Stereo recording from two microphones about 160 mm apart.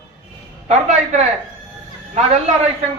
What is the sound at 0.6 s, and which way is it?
A man's voice, 45° right (ahead or behind).